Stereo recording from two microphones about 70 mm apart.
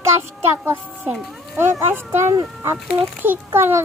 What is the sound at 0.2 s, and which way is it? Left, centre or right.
Child singing, right.